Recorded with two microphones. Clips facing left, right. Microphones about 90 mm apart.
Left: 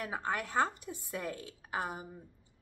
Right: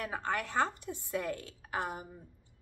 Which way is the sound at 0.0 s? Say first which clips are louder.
Right 1 dB; 10° left (ahead or behind).